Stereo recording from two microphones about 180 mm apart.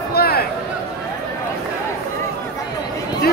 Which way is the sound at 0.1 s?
60° left (ahead or behind).